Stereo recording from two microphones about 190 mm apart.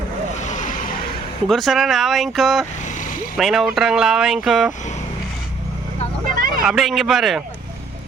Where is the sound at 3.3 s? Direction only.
Centre (ahead or behind).